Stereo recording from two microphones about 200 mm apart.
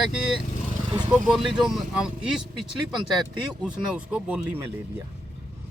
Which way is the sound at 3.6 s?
5° right (ahead or behind).